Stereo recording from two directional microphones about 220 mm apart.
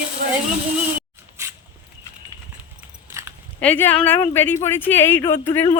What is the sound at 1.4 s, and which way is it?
Dog, 15° right (ahead or behind).